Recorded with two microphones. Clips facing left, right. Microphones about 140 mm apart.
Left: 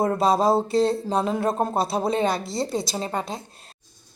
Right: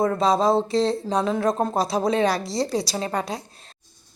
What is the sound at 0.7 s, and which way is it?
Speech, 35° left (ahead or behind).